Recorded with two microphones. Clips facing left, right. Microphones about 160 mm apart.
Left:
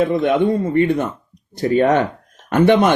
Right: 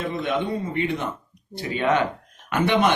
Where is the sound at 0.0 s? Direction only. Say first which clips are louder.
Left 10 dB; 55° left (ahead or behind).